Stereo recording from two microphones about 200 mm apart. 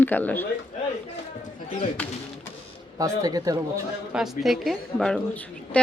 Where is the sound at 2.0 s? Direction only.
10° left (ahead or behind).